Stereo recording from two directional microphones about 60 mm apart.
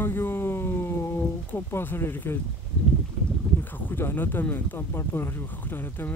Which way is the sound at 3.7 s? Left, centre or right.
Left.